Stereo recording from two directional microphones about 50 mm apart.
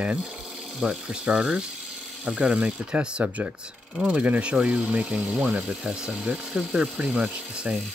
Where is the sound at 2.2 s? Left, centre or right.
Centre.